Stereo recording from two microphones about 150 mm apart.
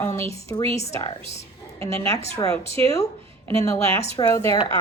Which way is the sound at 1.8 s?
20° left (ahead or behind).